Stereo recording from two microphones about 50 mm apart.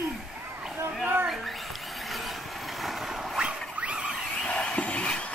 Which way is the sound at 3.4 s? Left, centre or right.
Right.